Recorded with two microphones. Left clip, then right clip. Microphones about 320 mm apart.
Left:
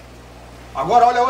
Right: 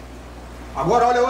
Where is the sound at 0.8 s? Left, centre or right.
Centre.